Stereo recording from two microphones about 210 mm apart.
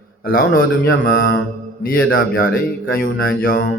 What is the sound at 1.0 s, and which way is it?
A man's voice, 45° left (ahead or behind).